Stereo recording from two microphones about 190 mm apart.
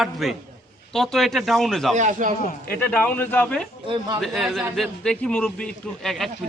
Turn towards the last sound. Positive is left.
turn(degrees=0)  # may be behind; listen again after turning